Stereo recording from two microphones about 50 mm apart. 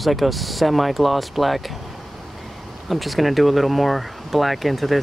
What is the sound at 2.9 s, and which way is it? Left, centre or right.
Speech, centre.